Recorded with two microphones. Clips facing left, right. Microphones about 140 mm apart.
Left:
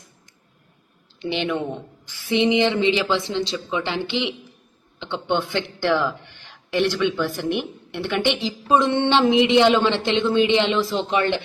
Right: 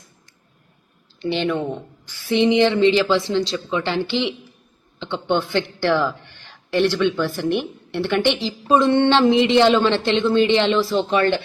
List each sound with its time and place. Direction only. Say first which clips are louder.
1.2 s a man's voice: right 3 dB; 15° left (ahead or behind)
7.9 s a man's voice: right 3 dB; 15° left (ahead or behind)